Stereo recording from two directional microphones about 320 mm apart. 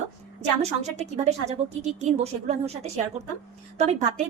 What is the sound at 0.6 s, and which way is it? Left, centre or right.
A woman's voice, right.